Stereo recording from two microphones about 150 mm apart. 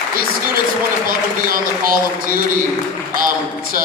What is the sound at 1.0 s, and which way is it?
A man's voice, 70° right (ahead or behind).